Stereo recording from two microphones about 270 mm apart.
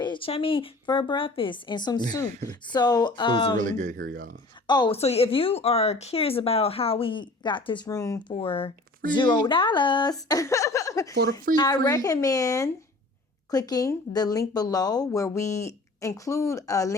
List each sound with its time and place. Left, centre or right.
0.0 s speech: centre
3.6 s speech: right
4.6 s speech: centre